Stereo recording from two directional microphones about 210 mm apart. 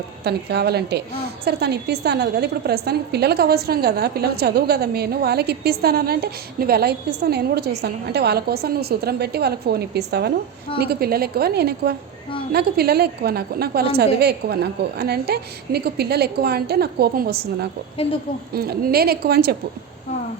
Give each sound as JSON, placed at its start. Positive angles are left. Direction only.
{"t": 0.3, "sound": "a woman's voice", "side_deg": -50}